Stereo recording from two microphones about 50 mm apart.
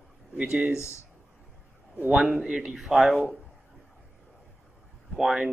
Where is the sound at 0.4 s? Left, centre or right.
Right.